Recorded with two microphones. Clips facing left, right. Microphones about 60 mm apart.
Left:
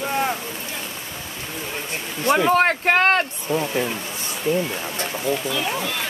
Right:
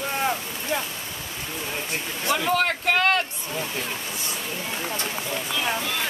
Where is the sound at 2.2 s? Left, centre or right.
Left.